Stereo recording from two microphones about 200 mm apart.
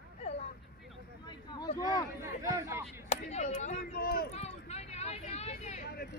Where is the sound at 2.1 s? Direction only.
15° right (ahead or behind).